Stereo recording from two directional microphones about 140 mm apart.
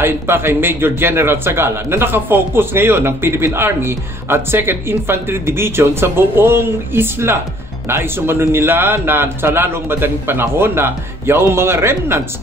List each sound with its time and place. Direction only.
0.0 s a man's voice: 15° right (ahead or behind)